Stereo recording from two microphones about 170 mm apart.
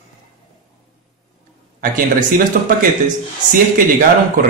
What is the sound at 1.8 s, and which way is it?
Speech, 55° right (ahead or behind).